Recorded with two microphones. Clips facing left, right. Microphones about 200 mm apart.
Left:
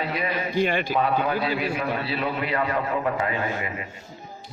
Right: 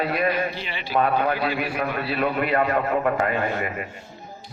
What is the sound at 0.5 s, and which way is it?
Speech, 50° left (ahead or behind).